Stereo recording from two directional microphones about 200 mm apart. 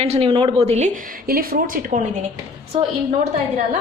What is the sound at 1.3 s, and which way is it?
Speech, 45° right (ahead or behind).